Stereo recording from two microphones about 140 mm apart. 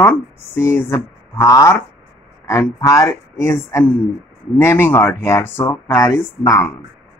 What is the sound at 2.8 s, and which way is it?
Speech, 25° left (ahead or behind).